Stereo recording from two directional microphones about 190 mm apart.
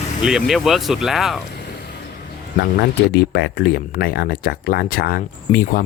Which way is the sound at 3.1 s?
55° left (ahead or behind).